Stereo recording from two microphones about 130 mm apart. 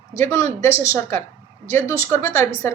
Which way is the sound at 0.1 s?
20° left (ahead or behind).